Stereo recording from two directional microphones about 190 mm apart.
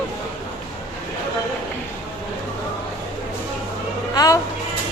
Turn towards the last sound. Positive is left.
turn(degrees=20)  # may be behind; listen again after turning